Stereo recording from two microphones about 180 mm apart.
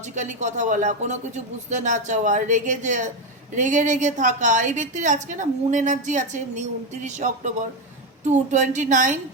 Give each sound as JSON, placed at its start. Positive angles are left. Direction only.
{"t": 0.0, "sound": "a woman's voice", "side_deg": -40}